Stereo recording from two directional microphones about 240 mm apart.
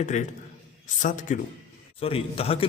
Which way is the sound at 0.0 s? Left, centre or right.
Left.